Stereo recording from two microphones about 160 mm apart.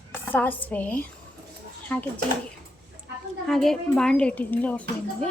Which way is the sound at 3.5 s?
5° left (ahead or behind).